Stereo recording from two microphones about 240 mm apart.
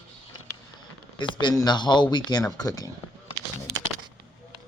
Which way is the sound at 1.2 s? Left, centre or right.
Centre.